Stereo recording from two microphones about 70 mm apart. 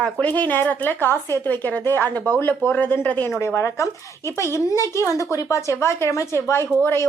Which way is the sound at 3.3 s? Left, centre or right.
Left.